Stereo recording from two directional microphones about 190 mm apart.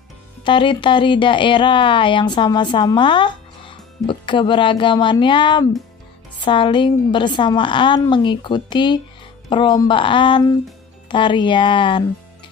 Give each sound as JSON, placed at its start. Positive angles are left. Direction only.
{"t": 0.4, "sound": "speech", "side_deg": 25}